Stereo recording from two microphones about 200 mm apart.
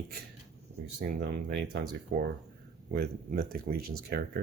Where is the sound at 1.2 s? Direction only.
55° right (ahead or behind).